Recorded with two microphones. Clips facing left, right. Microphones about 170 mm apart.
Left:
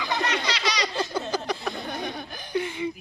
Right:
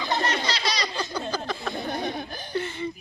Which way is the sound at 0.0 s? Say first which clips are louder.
Right 1 dB; 30° right (ahead or behind).